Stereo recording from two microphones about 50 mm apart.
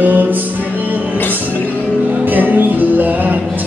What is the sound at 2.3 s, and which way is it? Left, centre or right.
Music, right.